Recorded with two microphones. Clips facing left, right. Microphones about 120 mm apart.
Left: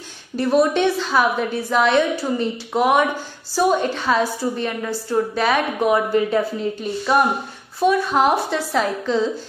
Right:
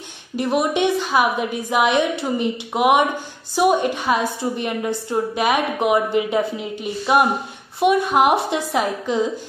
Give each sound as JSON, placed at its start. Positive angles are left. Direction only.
{"t": 0.4, "sound": "a woman's voice", "side_deg": -15}